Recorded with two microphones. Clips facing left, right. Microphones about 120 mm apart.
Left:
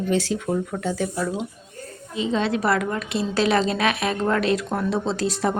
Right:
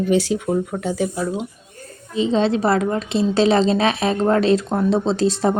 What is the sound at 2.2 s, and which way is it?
A woman's voice, 30° right (ahead or behind).